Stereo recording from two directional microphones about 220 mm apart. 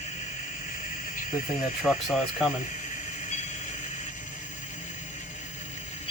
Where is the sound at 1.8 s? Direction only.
Centre (ahead or behind).